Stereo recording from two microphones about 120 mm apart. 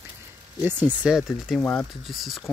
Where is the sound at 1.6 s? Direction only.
10° left (ahead or behind).